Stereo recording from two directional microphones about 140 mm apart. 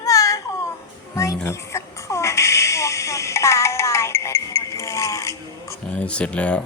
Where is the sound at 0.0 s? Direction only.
25° left (ahead or behind).